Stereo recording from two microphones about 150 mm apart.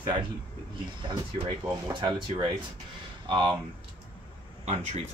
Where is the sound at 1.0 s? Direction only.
30° right (ahead or behind).